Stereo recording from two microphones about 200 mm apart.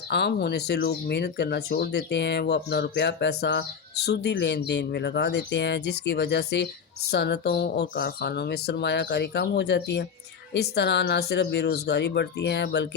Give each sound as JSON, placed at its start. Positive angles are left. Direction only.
{"t": 0.1, "sound": "speech", "side_deg": 55}